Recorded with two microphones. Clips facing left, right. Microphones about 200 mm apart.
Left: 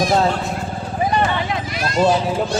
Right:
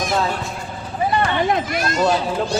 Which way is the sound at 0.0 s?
35° left (ahead or behind).